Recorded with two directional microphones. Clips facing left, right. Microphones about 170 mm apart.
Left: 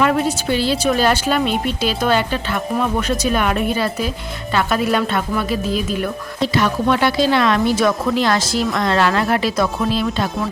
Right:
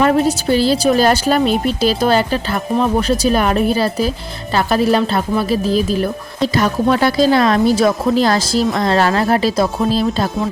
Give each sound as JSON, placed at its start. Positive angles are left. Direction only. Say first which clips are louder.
{"t": 0.0, "sound": "a woman's voice", "louder": "right 3 dB", "side_deg": -40}